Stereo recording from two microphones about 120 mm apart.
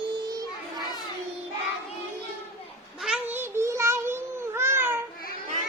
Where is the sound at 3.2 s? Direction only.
20° right (ahead or behind).